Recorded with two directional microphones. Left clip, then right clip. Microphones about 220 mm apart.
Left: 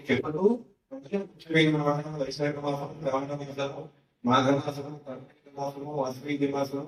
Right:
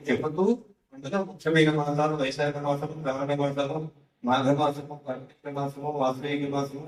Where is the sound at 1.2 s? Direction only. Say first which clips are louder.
Right 2 dB; centre (ahead or behind).